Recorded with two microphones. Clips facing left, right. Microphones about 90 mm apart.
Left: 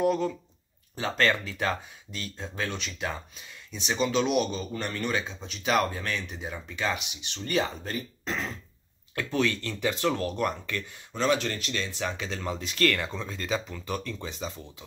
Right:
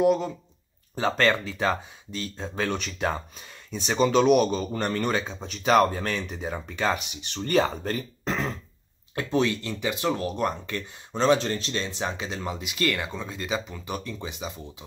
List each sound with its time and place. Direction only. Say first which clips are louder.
0.0 s speech: right 3 dB; 20° right (ahead or behind)
0.9 s speech: right 3 dB; 35° right (ahead or behind)
9.1 s speech: right 3 dB; 25° right (ahead or behind)